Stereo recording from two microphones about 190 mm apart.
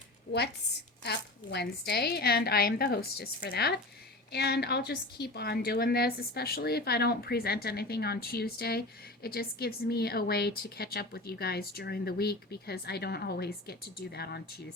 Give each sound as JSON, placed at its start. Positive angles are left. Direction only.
{"t": 1.0, "sound": "speech", "side_deg": 60}